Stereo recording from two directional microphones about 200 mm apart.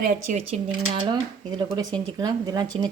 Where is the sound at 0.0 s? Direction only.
35° right (ahead or behind).